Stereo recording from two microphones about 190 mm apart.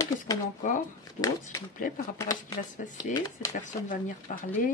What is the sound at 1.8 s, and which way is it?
Speech, 45° left (ahead or behind).